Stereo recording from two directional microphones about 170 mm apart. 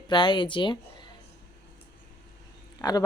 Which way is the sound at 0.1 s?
30° left (ahead or behind).